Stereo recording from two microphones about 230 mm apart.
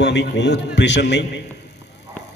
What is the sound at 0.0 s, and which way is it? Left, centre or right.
A man's voice, left.